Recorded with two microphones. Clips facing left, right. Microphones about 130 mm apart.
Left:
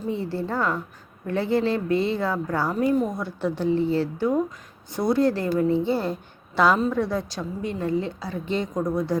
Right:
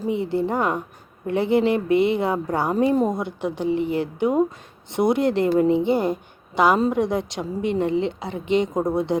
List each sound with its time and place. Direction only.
0.1 s a woman's voice: 20° right (ahead or behind)